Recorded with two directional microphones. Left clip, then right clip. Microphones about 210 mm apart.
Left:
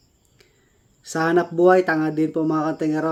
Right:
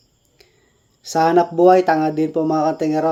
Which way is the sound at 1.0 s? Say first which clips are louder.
Right 5 dB; 15° left (ahead or behind).